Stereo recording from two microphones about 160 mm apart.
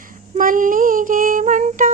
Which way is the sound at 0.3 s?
55° right (ahead or behind).